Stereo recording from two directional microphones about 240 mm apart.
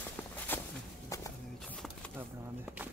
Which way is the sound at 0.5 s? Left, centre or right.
Centre.